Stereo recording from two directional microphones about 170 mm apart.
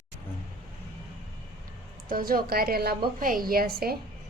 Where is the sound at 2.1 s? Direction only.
60° right (ahead or behind).